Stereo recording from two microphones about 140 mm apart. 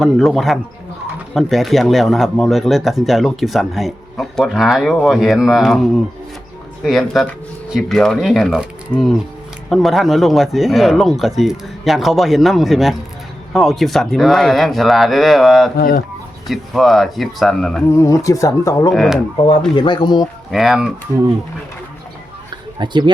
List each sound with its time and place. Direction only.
0.0 s speech: centre (ahead or behind)
15.8 s speech: 90° left
16.5 s speech: centre (ahead or behind)
17.8 s speech: 20° left (ahead or behind)
18.9 s speech: centre (ahead or behind)
19.7 s speech: 35° left (ahead or behind)
20.5 s speech: centre (ahead or behind)
22.8 s speech: 35° right (ahead or behind)